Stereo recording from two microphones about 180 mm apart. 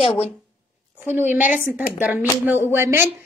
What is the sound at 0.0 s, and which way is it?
Speech, 30° left (ahead or behind).